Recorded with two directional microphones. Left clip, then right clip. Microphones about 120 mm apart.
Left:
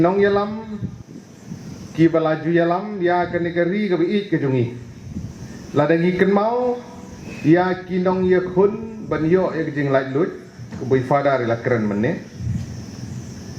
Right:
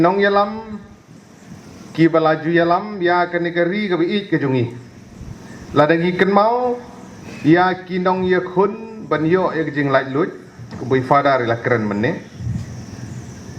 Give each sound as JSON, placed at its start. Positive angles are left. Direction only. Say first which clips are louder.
{"t": 0.0, "sound": "a man's voice", "louder": "right 2 dB", "side_deg": -35}
{"t": 2.0, "sound": "a man's voice", "louder": "right 3 dB", "side_deg": -30}
{"t": 5.7, "sound": "a man's voice", "louder": "right 3 dB", "side_deg": -35}